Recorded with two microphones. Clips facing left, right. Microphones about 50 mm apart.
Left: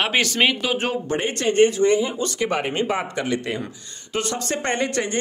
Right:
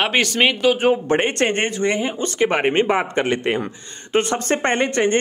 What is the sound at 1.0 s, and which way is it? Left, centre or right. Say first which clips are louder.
Speech: right 4 dB; right.